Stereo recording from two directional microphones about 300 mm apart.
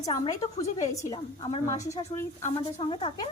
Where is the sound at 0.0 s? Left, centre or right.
Centre.